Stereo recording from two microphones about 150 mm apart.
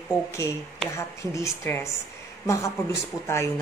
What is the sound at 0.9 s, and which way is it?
Speech, 20° left (ahead or behind).